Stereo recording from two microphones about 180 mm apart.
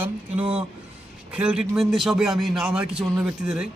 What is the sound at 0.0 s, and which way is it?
A man's voice, 5° right (ahead or behind).